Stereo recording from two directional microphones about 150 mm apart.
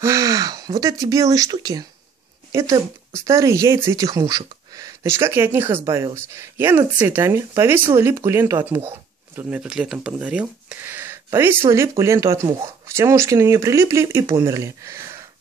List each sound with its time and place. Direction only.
0.0 s speech: 20° right (ahead or behind)